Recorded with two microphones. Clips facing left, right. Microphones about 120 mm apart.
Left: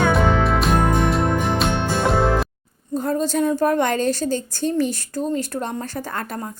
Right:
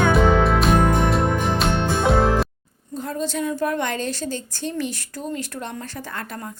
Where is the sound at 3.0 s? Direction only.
40° left (ahead or behind).